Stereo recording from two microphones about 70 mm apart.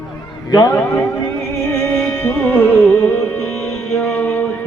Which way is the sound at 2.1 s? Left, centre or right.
Left.